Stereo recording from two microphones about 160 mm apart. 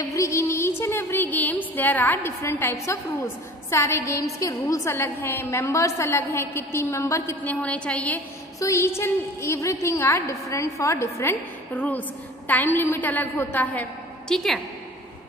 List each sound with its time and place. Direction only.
0.0 s a woman's voice: 20° left (ahead or behind); by 14.6 s centre (ahead or behind)